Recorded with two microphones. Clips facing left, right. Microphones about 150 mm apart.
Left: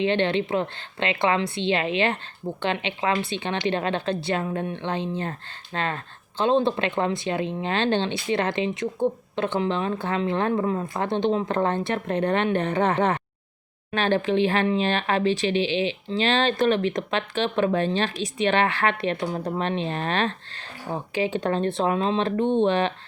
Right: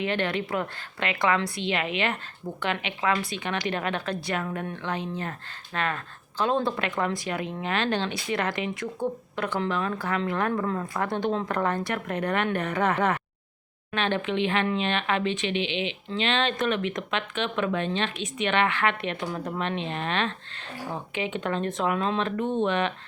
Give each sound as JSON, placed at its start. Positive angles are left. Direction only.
{"t": 0.0, "sound": "speech", "side_deg": 25}